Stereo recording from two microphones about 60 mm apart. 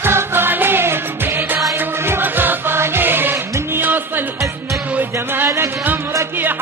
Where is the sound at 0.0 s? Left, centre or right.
Right.